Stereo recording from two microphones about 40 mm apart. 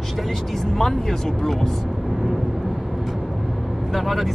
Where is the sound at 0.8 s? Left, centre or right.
Centre.